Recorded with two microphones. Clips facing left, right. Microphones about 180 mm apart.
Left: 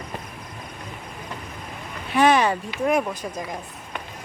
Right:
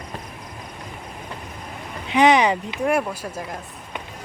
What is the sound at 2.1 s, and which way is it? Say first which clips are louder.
Speech: right 2 dB; 20° right (ahead or behind).